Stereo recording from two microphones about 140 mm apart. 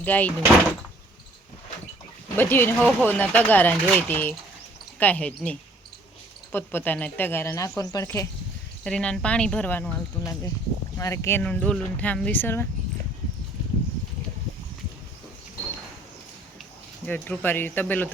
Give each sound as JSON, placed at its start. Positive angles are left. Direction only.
{"t": 0.0, "sound": "speech", "side_deg": 10}
{"t": 2.3, "sound": "speech", "side_deg": 15}
{"t": 8.8, "sound": "speech", "side_deg": 5}
{"t": 10.9, "sound": "speech", "side_deg": 20}
{"t": 17.1, "sound": "speech", "side_deg": 15}